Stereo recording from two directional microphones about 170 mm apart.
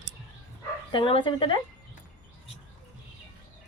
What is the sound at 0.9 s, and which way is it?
Speech, 30° left (ahead or behind).